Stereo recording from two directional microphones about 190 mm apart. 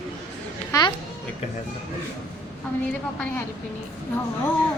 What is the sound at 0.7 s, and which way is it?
Speech, 20° left (ahead or behind).